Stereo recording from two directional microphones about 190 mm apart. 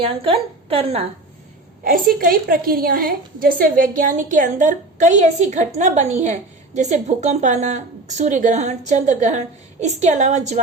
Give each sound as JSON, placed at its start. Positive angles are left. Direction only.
{"t": 0.0, "sound": "a woman's voice", "side_deg": -30}
{"t": 1.8, "sound": "a woman's voice", "side_deg": -50}